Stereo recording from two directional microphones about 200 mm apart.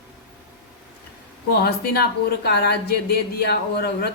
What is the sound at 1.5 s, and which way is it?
Speech, 55° left (ahead or behind).